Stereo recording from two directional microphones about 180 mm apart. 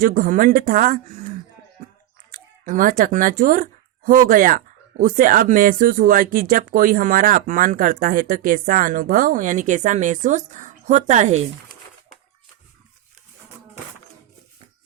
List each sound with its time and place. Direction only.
0.0 s speech: 50° right (ahead or behind)
2.3 s speech: 50° right (ahead or behind)